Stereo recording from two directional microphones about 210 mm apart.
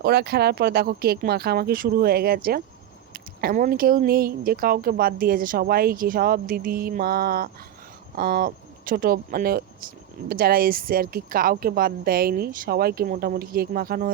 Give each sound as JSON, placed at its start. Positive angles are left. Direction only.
{"t": 0.0, "sound": "speech", "side_deg": -50}